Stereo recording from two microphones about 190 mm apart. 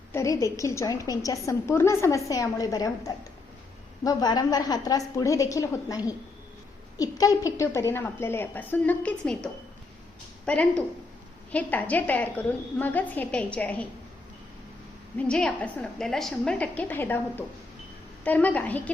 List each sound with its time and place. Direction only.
0.1 s a woman's voice: 15° left (ahead or behind)
15.2 s a woman's voice: 5° left (ahead or behind)